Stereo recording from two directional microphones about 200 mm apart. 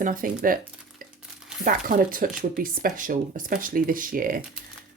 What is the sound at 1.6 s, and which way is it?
Speech, 45° right (ahead or behind).